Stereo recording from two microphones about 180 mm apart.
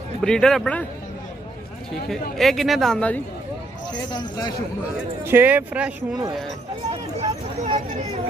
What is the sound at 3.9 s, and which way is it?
Speech, 25° left (ahead or behind).